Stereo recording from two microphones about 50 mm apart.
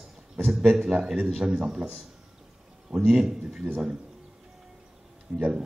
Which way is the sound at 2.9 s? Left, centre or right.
Centre.